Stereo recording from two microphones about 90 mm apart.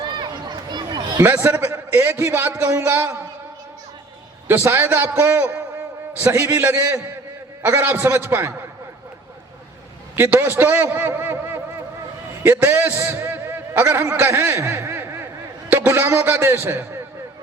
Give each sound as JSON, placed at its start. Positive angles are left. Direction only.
{"t": 0.0, "sound": "chatter", "side_deg": -50}
{"t": 1.2, "sound": "a man's voice", "side_deg": -20}
{"t": 4.4, "sound": "a man's voice", "side_deg": -25}
{"t": 6.1, "sound": "a man's voice", "side_deg": -35}
{"t": 10.2, "sound": "a man's voice", "side_deg": -20}
{"t": 14.6, "sound": "a sound", "side_deg": -30}
{"t": 15.9, "sound": "a man's voice", "side_deg": -25}